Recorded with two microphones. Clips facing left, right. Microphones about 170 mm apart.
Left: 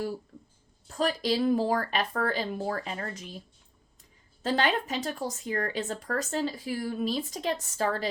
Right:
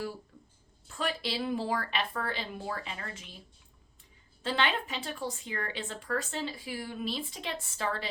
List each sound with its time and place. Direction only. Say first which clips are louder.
0.9 s speech: left 7 dB; 40° left (ahead or behind)
4.4 s speech: left 4 dB; 40° left (ahead or behind)